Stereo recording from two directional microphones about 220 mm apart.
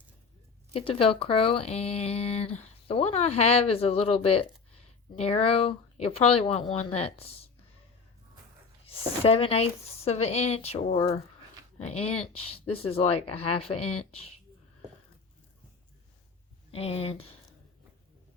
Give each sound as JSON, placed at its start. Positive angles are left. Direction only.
{"t": 0.7, "sound": "speech", "side_deg": 25}
{"t": 8.9, "sound": "speech", "side_deg": 25}
{"t": 16.7, "sound": "speech", "side_deg": 25}